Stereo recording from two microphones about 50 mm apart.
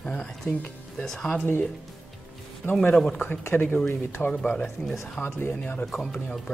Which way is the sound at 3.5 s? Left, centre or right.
Left.